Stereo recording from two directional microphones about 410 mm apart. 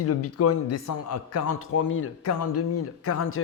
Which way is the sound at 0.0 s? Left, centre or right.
Left.